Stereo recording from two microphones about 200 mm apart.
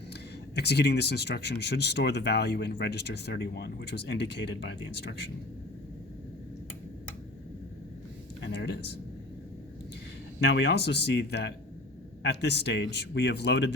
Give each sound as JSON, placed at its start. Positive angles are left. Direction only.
{"t": 0.1, "sound": "speech", "side_deg": 55}
{"t": 8.4, "sound": "a sound", "side_deg": 60}
{"t": 10.4, "sound": "speech", "side_deg": 60}